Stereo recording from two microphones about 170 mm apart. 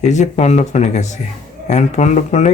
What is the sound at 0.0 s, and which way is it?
Speech, 45° left (ahead or behind).